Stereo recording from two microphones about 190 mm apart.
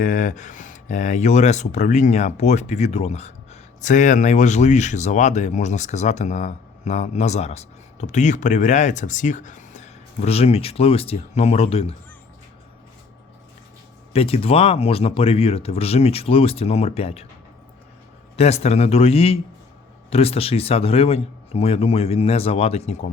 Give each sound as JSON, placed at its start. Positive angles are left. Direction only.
{"t": 0.0, "sound": "speech", "side_deg": 45}
{"t": 14.1, "sound": "speech", "side_deg": 30}
{"t": 18.3, "sound": "speech", "side_deg": 35}